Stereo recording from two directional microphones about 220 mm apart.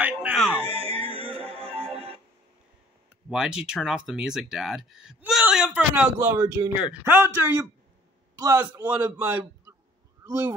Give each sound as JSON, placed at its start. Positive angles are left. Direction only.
{"t": 0.0, "sound": "music", "side_deg": -5}
{"t": 0.7, "sound": "music", "side_deg": -25}
{"t": 3.3, "sound": "a man's voice", "side_deg": -5}